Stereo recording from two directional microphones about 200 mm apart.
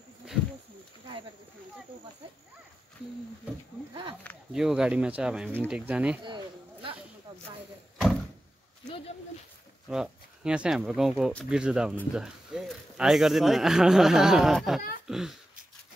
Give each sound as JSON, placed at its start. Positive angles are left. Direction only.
{"t": 4.5, "sound": "speech", "side_deg": 0}
{"t": 6.2, "sound": "a sound", "side_deg": -25}
{"t": 9.8, "sound": "speech", "side_deg": -5}